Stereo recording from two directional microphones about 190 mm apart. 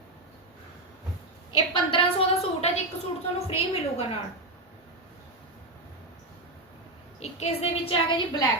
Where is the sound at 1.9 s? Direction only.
30° left (ahead or behind).